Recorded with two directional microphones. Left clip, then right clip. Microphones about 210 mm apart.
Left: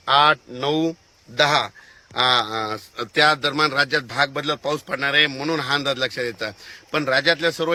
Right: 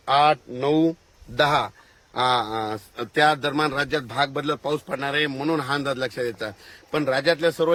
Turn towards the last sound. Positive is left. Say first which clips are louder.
# left 1 dB
turn(degrees=-15)  # may be behind; listen again after turning